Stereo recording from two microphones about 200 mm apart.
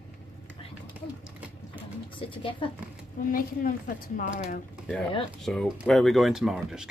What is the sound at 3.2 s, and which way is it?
A woman's voice, 45° left (ahead or behind).